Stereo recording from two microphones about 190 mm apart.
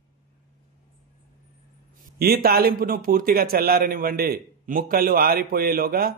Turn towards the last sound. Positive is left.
turn(degrees=-50)  # may be behind; listen again after turning